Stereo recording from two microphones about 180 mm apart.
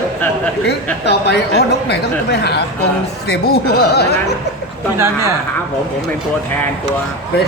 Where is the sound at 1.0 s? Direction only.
65° left (ahead or behind).